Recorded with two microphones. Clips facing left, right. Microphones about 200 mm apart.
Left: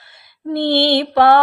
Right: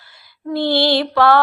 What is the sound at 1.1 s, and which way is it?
Mantra, 20° left (ahead or behind).